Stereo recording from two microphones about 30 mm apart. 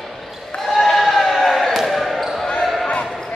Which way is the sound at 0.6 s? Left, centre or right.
Centre.